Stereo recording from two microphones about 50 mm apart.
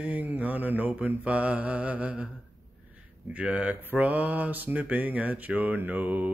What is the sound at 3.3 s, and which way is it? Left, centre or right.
Speech, right.